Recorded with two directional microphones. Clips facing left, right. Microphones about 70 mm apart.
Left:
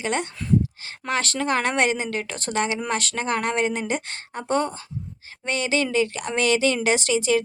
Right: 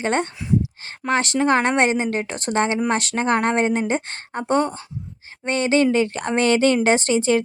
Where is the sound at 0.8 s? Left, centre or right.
Right.